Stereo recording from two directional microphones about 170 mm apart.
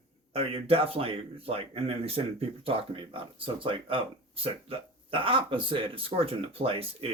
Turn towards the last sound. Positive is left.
turn(degrees=-35)  # may be behind; listen again after turning